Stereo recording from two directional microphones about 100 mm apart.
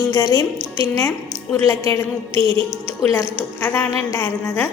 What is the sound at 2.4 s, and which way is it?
Music, 50° right (ahead or behind).